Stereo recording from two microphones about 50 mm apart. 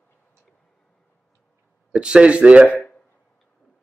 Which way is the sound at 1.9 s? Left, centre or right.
Centre.